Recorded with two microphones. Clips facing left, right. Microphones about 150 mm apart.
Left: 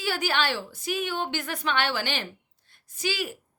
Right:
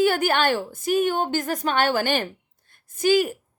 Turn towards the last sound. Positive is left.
turn(degrees=-45)  # may be behind; listen again after turning